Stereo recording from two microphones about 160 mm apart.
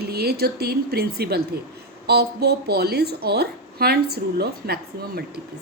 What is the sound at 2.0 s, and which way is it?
Speech, 90° right.